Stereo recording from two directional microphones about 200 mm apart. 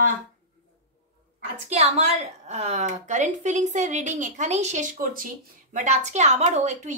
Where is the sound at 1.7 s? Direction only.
30° right (ahead or behind).